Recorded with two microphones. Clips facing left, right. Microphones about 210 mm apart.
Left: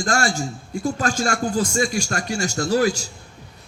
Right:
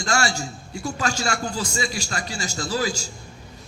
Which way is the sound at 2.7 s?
65° left (ahead or behind).